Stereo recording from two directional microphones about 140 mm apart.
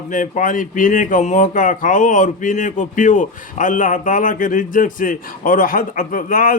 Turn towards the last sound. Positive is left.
turn(degrees=75)  # may be behind; listen again after turning